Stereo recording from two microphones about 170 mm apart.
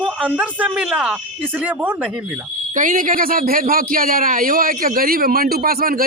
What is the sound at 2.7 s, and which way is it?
A man's voice, 50° right (ahead or behind).